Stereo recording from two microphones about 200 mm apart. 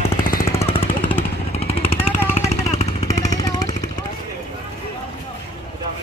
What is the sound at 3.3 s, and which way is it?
Vehicle, 20° left (ahead or behind).